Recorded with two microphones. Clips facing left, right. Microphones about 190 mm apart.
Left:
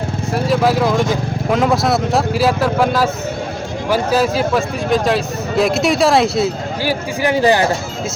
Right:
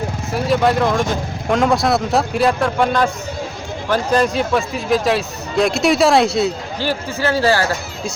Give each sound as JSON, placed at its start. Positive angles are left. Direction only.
{"t": 0.3, "sound": "speech", "side_deg": 0}
{"t": 6.8, "sound": "a man's voice", "side_deg": 15}